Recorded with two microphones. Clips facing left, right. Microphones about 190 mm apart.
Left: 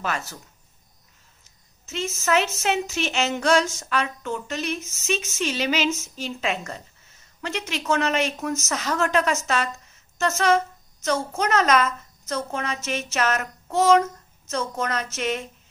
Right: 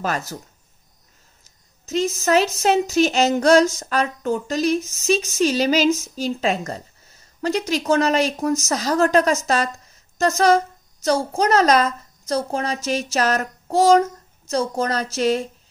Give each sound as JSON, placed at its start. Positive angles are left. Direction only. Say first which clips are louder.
{"t": 0.0, "sound": "a woman's voice", "louder": "right 4 dB", "side_deg": -40}
{"t": 1.4, "sound": "a woman's voice", "louder": "right 4 dB", "side_deg": -35}